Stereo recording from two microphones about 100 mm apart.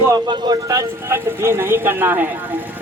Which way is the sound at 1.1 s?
20° right (ahead or behind).